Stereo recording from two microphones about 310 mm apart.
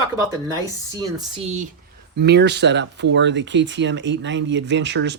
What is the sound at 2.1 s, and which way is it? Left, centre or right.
Speech, right.